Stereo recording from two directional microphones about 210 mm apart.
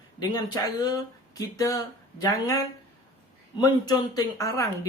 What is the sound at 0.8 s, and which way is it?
Speech, 15° left (ahead or behind).